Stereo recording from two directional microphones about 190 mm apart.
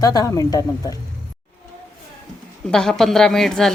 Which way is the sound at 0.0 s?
20° left (ahead or behind).